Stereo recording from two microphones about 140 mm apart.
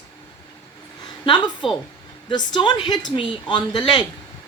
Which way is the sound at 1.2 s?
35° left (ahead or behind).